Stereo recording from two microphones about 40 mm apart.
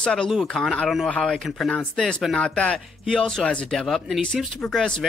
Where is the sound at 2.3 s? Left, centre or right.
Left.